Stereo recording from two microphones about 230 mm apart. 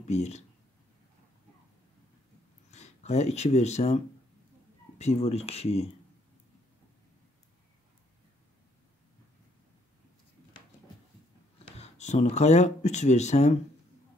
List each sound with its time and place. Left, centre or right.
0.0 s speech: left
2.7 s speech: left
11.7 s speech: left